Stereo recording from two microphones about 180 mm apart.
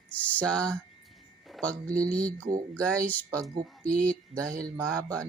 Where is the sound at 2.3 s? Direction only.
50° right (ahead or behind).